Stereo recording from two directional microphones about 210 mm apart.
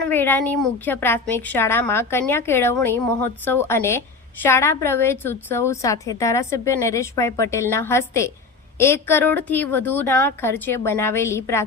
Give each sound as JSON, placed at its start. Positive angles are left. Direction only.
{"t": 0.1, "sound": "a woman's voice", "side_deg": 10}